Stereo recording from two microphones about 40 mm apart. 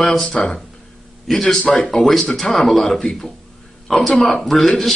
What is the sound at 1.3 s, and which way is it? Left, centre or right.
A man's voice, centre.